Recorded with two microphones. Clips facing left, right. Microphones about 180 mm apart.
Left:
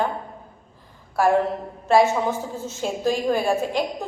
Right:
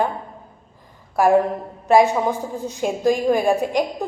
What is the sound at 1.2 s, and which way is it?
Speech, 15° right (ahead or behind).